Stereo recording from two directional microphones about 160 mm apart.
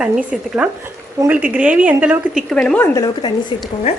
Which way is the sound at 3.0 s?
25° left (ahead or behind).